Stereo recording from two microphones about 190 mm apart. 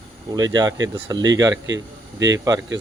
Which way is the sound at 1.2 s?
75° right (ahead or behind).